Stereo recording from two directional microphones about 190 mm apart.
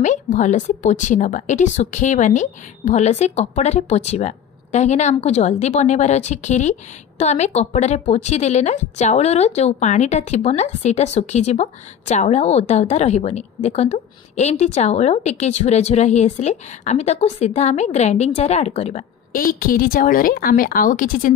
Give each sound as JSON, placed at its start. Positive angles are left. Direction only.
{"t": 0.0, "sound": "speech", "side_deg": 40}